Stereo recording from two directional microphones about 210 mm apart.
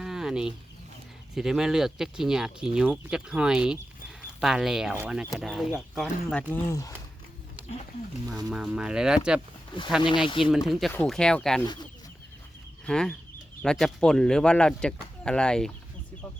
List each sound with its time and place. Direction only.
0.0 s chicken: centre (ahead or behind)
1.4 s speech: centre (ahead or behind); by 6.9 s 15° left (ahead or behind)
8.4 s speech: 5° right (ahead or behind)
10.2 s speech: 25° left (ahead or behind)
10.7 s speech: centre (ahead or behind)
12.8 s speech: 5° left (ahead or behind)